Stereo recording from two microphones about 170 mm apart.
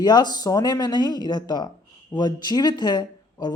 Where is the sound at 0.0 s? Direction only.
25° left (ahead or behind).